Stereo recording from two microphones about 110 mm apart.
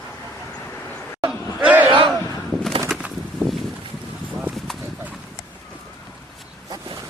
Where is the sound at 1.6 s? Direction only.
15° right (ahead or behind).